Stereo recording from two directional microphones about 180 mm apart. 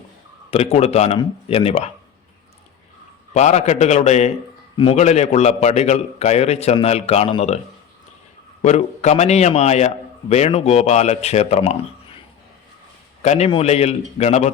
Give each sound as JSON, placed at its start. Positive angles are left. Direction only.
{"t": 0.5, "sound": "a man's voice", "side_deg": 35}
{"t": 3.3, "sound": "a man's voice", "side_deg": 40}
{"t": 8.6, "sound": "a man's voice", "side_deg": 40}
{"t": 13.2, "sound": "a man's voice", "side_deg": 40}